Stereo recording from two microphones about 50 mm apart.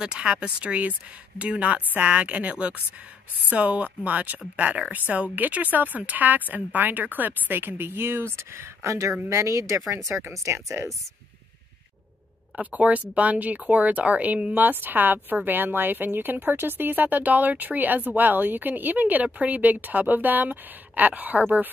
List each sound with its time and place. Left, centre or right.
0.0 s speech: right
12.5 s speech: right